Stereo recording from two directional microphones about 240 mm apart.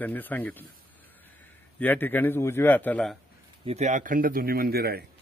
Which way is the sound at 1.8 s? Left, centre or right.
Centre.